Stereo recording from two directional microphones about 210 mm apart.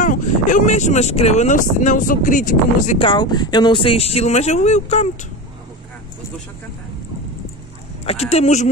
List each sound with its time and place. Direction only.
0.0 s speech: 35° left (ahead or behind)
3.0 s speech: 20° left (ahead or behind)
8.0 s speech: 30° left (ahead or behind)